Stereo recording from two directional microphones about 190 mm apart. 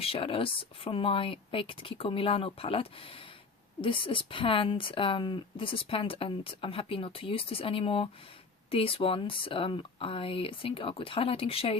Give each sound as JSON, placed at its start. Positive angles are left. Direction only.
{"t": 0.0, "sound": "speech", "side_deg": 30}